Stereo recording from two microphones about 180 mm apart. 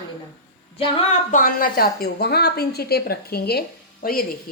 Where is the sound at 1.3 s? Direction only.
50° left (ahead or behind).